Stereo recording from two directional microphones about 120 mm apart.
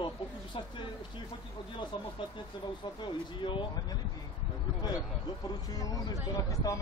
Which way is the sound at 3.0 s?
45° left (ahead or behind).